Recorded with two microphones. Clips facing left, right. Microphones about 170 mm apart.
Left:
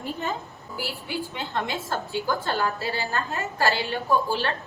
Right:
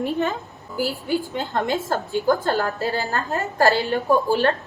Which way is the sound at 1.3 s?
40° right (ahead or behind).